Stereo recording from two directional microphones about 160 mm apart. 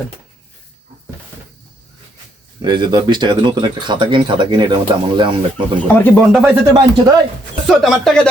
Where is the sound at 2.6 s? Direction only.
30° right (ahead or behind).